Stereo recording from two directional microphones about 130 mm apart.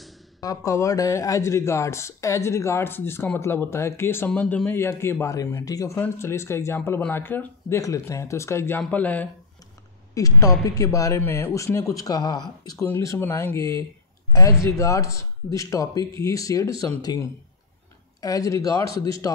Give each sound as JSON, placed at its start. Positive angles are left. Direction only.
{"t": 0.4, "sound": "speech", "side_deg": 25}
{"t": 10.1, "sound": "speech", "side_deg": 25}